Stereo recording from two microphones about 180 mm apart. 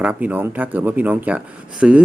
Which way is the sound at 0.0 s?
10° right (ahead or behind).